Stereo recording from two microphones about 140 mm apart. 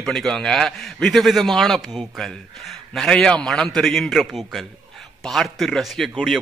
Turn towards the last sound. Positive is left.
turn(degrees=0)  # may be behind; listen again after turning